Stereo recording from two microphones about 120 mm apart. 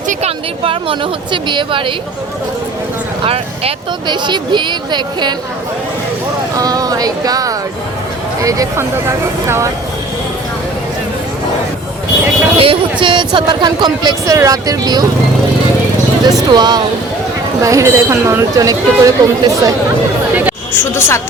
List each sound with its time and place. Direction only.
0.1 s speech: 60° right (ahead or behind); by 1.9 s 40° right (ahead or behind)
3.2 s speech: 55° right (ahead or behind)
4.0 s speech: 40° right (ahead or behind)
6.6 s speech: 30° right (ahead or behind)
12.5 s speech: 45° right (ahead or behind)
16.5 s speech: 40° right (ahead or behind)
17.6 s speech: 25° right (ahead or behind)
20.7 s a woman's voice: 20° left (ahead or behind)